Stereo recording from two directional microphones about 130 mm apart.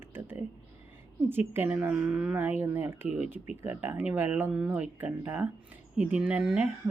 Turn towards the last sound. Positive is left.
turn(degrees=-10)  # may be behind; listen again after turning